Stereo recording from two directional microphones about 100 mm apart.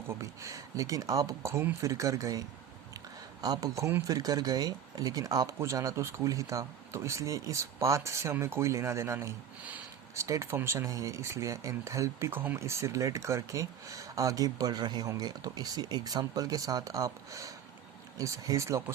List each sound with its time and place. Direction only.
0.1 s speech: 30° right (ahead or behind)
3.4 s speech: 45° right (ahead or behind)
3.8 s speech: 30° right (ahead or behind)